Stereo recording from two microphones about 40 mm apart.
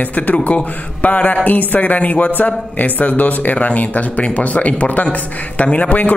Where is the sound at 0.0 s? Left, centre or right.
Left.